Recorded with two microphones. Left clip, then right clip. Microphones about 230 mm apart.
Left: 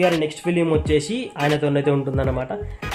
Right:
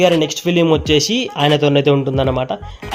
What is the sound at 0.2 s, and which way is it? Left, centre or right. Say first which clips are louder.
Speech: right 6 dB; right.